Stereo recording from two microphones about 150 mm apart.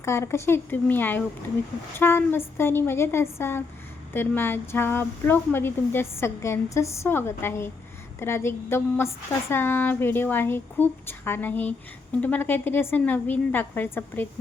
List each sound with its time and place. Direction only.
0.0 s speech: 20° left (ahead or behind)